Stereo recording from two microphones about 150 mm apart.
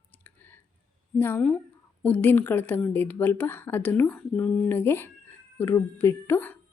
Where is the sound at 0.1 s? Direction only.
10° left (ahead or behind).